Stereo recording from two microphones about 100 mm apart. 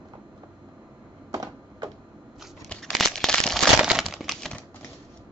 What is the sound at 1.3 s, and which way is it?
Computer keyboard, 40° right (ahead or behind).